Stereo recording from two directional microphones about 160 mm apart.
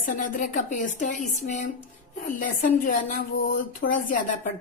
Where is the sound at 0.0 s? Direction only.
55° left (ahead or behind).